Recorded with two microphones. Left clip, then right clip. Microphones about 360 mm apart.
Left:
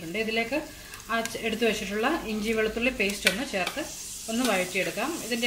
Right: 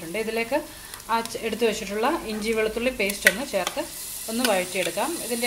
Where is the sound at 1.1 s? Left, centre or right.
Centre.